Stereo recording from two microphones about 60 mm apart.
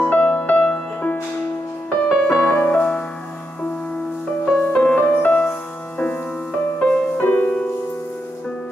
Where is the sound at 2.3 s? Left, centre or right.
Left.